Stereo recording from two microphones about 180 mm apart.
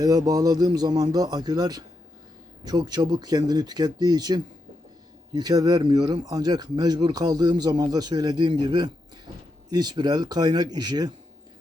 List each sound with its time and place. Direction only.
0.0 s speech: 20° right (ahead or behind)